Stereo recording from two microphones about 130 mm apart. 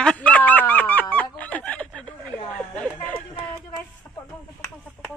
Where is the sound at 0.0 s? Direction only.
10° left (ahead or behind).